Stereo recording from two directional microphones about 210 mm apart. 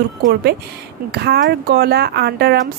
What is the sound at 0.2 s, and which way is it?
A woman's voice, 50° right (ahead or behind).